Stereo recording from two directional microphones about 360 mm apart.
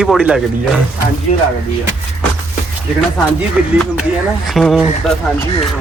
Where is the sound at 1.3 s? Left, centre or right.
Centre.